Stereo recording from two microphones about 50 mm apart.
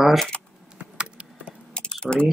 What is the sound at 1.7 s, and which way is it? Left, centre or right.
Typing, centre.